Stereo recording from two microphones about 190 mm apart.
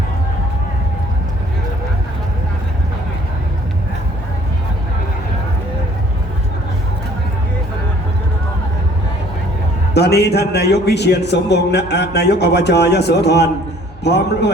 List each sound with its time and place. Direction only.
9.9 s a man's voice: 60° left (ahead or behind)